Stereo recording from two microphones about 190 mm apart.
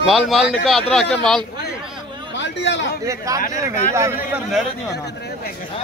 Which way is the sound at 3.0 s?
15° right (ahead or behind).